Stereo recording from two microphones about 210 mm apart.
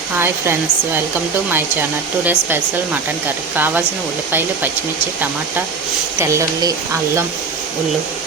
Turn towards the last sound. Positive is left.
turn(degrees=-15)  # may be behind; listen again after turning